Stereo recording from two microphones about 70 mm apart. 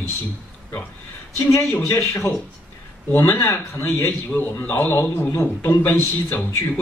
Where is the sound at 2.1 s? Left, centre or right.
Left.